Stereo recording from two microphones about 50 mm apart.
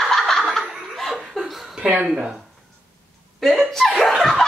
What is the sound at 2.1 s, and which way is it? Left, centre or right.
Speech, centre.